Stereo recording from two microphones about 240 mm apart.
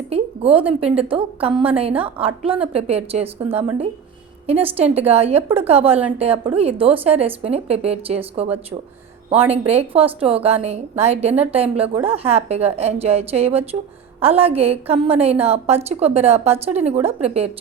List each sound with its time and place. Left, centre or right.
0.1 s a sound: right
0.7 s a woman's voice: right
4.4 s a woman's voice: right